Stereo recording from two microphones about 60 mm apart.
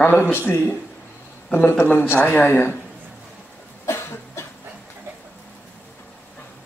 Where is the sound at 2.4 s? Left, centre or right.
Left.